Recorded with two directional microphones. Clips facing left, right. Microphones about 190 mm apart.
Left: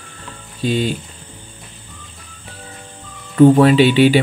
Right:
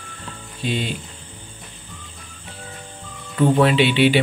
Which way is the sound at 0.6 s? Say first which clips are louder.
Left 6 dB; 40° left (ahead or behind).